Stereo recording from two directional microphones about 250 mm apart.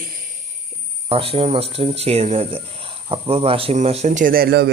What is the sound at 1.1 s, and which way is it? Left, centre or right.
Speech, right.